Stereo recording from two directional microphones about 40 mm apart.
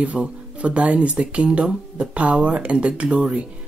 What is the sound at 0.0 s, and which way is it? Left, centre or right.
Speech, right.